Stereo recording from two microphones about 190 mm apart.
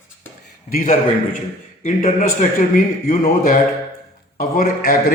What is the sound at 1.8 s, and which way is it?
Speech, 45° left (ahead or behind).